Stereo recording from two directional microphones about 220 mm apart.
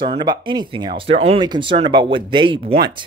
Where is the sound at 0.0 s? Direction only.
20° right (ahead or behind).